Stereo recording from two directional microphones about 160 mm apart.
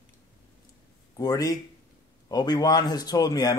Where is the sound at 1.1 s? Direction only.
20° left (ahead or behind).